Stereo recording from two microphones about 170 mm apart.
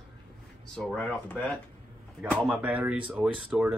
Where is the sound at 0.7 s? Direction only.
5° left (ahead or behind).